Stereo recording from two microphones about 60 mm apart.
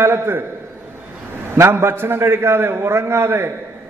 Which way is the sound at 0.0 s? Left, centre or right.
Right.